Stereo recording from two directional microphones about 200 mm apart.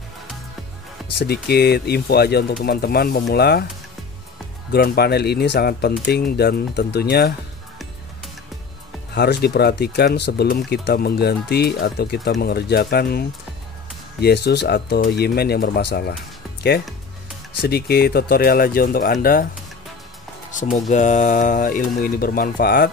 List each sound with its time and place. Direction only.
1.2 s speech: 55° left (ahead or behind)
4.7 s speech: 50° left (ahead or behind)
9.1 s speech: 55° left (ahead or behind)
17.6 s speech: 50° left (ahead or behind)
20.9 s speech: 40° left (ahead or behind)